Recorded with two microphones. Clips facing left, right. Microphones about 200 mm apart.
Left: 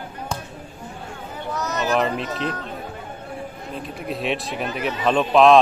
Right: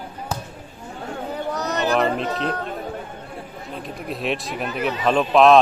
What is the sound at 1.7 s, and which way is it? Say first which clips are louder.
Speech: right 1 dB; 35° right (ahead or behind).